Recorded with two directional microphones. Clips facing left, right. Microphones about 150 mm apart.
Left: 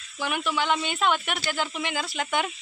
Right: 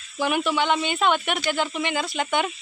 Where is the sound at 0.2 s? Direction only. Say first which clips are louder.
Right 5 dB; 5° right (ahead or behind).